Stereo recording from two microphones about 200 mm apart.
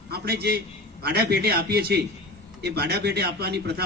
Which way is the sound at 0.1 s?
50° right (ahead or behind).